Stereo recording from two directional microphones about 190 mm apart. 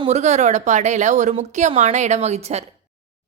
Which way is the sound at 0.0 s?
35° right (ahead or behind).